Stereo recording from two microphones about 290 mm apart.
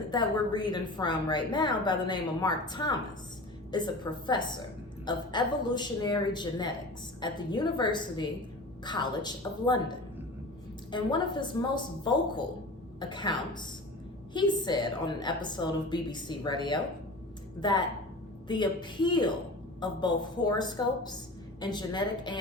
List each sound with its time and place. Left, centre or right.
0.1 s a woman's voice: centre
4.3 s a woman's voice: centre